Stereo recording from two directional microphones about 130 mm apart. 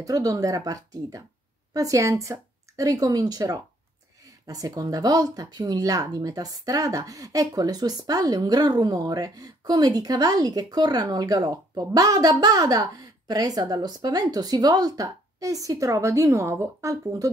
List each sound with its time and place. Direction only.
0.0 s speech: 25° right (ahead or behind)